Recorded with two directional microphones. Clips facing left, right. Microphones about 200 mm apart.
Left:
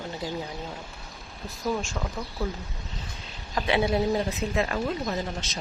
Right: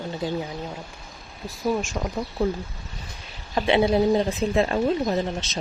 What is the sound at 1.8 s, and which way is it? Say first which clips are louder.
Speech: right 4 dB; 15° right (ahead or behind).